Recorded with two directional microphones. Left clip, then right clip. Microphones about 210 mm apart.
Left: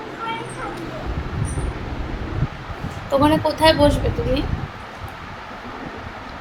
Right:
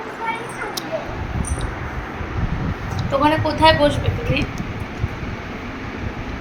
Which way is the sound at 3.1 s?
25° left (ahead or behind).